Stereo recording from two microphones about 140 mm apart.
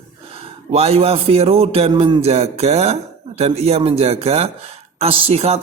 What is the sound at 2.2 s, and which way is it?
A man's voice, 50° right (ahead or behind).